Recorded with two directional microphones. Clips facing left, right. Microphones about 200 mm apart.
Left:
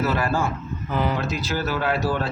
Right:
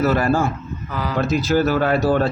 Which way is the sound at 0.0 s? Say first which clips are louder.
Right 5 dB; 45° right (ahead or behind).